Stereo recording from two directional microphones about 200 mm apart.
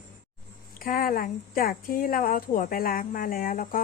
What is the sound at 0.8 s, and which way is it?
Speech, 45° left (ahead or behind).